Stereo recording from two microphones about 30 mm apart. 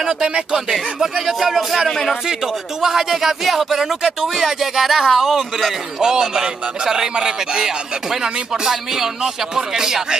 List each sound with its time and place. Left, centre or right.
0.0 s speech: right
1.2 s speech: centre
2.2 s speech: centre
3.3 s speech: centre
5.9 s speech: right